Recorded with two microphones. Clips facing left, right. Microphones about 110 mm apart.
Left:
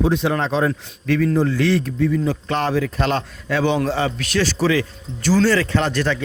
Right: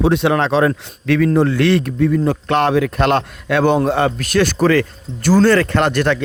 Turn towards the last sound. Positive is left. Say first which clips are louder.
# right 4 dB
turn(degrees=-55)  # may be behind; listen again after turning